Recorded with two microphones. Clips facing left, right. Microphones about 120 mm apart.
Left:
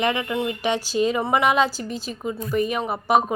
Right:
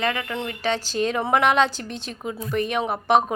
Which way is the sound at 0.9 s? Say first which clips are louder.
Left 1 dB; 5° left (ahead or behind).